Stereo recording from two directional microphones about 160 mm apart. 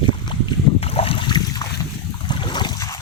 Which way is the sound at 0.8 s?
40° left (ahead or behind).